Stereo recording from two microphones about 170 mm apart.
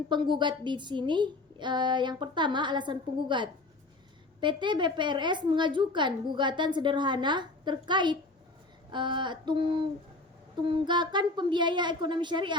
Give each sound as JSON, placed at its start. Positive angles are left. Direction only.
{"t": 0.1, "sound": "a woman's voice", "side_deg": -25}
{"t": 10.8, "sound": "a woman's voice", "side_deg": -25}